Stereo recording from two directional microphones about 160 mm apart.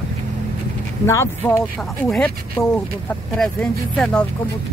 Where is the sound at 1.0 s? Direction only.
15° left (ahead or behind).